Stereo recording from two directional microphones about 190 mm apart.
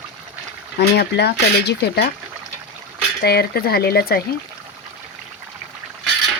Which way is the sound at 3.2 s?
55° left (ahead or behind).